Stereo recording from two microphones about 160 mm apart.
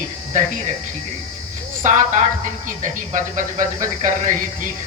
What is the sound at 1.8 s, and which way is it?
Speech, 50° right (ahead or behind).